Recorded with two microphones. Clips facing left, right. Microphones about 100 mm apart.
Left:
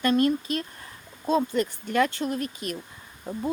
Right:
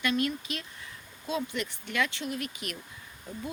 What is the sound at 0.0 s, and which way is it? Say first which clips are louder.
Speech: left 7 dB; 40° left (ahead or behind).